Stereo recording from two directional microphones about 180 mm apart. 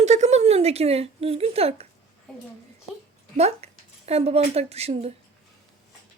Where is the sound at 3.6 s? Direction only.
35° right (ahead or behind).